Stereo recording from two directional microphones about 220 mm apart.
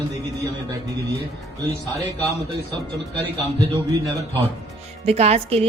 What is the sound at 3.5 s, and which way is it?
Speech, 15° right (ahead or behind).